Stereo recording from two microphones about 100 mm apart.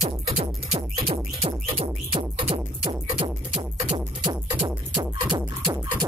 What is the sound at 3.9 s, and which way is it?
Music, 50° right (ahead or behind).